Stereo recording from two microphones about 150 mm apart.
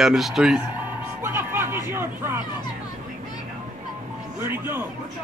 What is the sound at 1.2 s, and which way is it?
Chatter, 15° right (ahead or behind).